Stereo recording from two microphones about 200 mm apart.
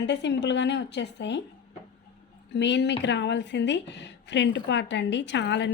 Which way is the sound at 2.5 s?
60° left (ahead or behind).